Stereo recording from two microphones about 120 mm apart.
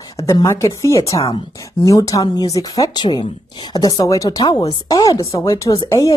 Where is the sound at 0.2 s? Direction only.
25° left (ahead or behind).